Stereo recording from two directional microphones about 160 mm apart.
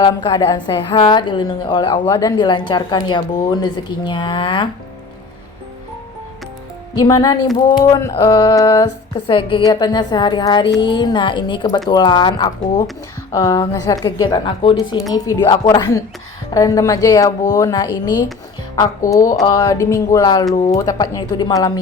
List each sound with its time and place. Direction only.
0.0 s a woman's voice: 20° left (ahead or behind)
7.0 s a woman's voice: 25° left (ahead or behind)